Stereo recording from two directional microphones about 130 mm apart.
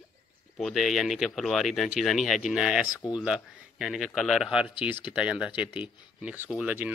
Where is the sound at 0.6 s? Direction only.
Centre (ahead or behind).